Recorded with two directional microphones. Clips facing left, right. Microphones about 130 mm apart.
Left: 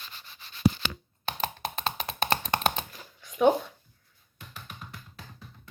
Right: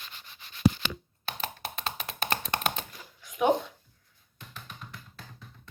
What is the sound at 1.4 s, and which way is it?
Computer keyboard, 35° left (ahead or behind).